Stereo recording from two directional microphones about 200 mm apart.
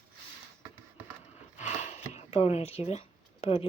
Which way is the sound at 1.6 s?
35° left (ahead or behind).